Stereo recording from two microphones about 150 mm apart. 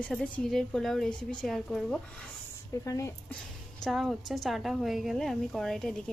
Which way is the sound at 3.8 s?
Centre (ahead or behind).